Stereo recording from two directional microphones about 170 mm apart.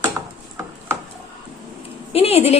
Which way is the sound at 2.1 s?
35° left (ahead or behind).